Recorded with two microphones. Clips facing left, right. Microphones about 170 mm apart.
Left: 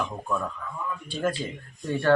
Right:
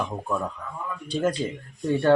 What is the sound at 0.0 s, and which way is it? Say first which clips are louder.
A man's voice: right 1 dB; 15° right (ahead or behind).